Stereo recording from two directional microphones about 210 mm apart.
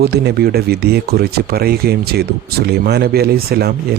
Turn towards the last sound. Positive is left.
turn(degrees=-50)  # may be behind; listen again after turning